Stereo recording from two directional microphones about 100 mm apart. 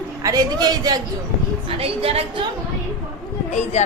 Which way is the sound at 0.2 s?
40° right (ahead or behind).